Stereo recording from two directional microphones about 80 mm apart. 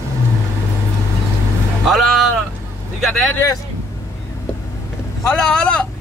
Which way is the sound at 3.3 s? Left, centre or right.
Left.